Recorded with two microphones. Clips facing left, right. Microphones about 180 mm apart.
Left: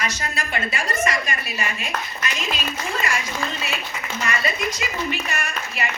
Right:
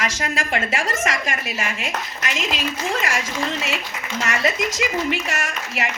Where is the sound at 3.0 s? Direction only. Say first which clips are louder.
Right 2 dB; 90° right.